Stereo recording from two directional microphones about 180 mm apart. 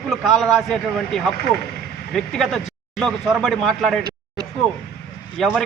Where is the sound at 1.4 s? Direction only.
60° left (ahead or behind).